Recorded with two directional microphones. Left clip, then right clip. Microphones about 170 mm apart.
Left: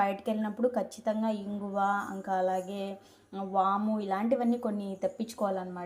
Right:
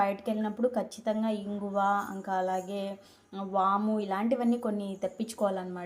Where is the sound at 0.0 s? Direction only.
Centre (ahead or behind).